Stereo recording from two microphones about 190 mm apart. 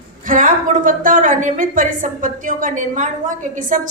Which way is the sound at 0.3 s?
45° right (ahead or behind).